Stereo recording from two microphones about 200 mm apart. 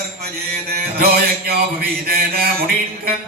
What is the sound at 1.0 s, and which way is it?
Music, 50° right (ahead or behind).